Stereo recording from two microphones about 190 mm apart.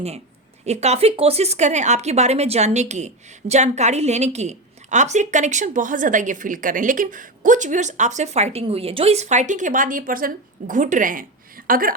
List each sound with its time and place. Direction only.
0.6 s speech: 35° right (ahead or behind)